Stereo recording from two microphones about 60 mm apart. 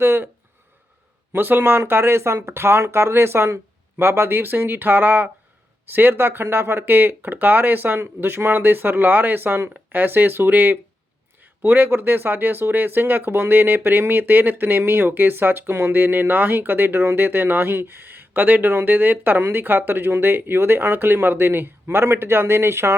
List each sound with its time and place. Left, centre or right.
0.0 s speech: right
1.3 s speech: right